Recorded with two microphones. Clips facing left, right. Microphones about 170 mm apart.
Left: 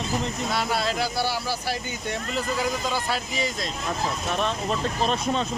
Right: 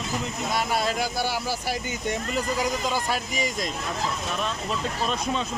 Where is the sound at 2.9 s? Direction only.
15° right (ahead or behind).